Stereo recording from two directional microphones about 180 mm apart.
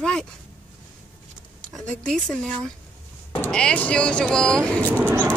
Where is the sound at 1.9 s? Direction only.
5° left (ahead or behind).